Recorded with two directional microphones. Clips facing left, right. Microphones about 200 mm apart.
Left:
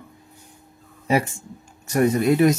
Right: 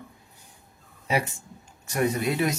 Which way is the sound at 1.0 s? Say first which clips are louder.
Left 6 dB; 50° left (ahead or behind).